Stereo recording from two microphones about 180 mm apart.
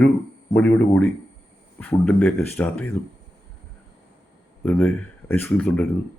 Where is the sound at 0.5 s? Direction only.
5° left (ahead or behind).